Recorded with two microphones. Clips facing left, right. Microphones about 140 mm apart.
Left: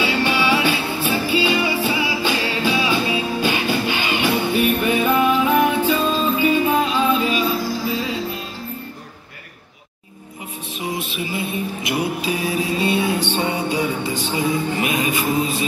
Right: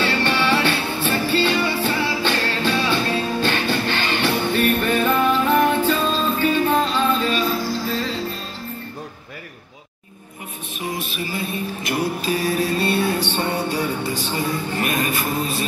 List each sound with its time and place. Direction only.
0.0 s music: 10° left (ahead or behind)
10.8 s music: 20° left (ahead or behind)
11.9 s mantra: 10° left (ahead or behind)